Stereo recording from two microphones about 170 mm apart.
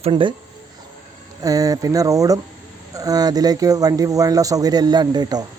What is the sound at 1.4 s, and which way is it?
Speech, 20° right (ahead or behind).